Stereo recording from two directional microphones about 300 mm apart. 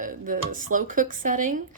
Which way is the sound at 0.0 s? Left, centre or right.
Right.